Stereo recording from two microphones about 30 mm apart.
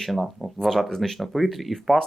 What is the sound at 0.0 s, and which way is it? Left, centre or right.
Speech, centre.